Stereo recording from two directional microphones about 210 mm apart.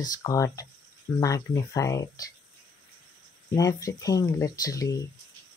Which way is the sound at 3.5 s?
15° left (ahead or behind).